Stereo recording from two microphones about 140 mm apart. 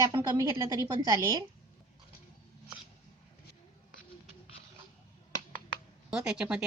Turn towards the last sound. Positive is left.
turn(degrees=-5)  # may be behind; listen again after turning